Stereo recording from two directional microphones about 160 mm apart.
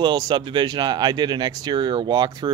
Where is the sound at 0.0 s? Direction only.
30° right (ahead or behind).